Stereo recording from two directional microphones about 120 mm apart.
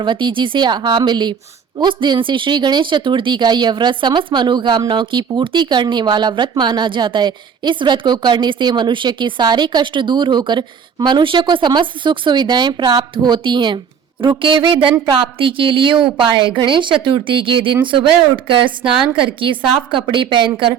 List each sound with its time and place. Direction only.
0.0 s a woman's voice: 40° right (ahead or behind)
20.0 s a woman's voice: 45° right (ahead or behind)